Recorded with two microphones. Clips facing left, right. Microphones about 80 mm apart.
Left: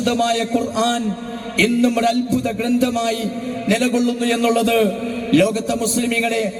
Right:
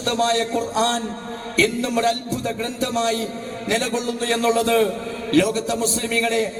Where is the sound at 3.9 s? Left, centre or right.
Right.